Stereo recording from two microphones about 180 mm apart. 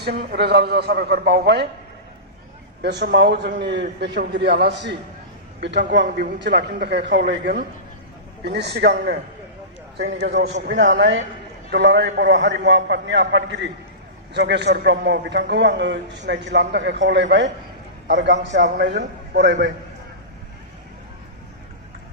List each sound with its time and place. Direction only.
0.0 s a man's voice: 55° right (ahead or behind)
2.8 s a man's voice: 65° right (ahead or behind)
10.4 s a man's voice: 75° right (ahead or behind)
14.3 s a man's voice: 70° right (ahead or behind)
18.8 s a man's voice: 65° right (ahead or behind)